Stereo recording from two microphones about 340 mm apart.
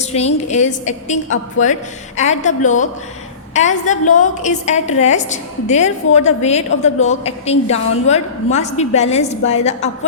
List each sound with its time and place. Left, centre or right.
0.0 s a woman's voice: centre